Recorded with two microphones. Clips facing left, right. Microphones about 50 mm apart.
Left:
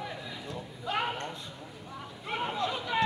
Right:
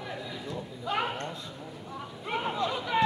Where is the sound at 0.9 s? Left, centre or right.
Centre.